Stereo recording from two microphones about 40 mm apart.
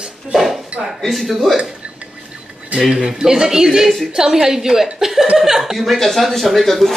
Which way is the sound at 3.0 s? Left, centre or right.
Centre.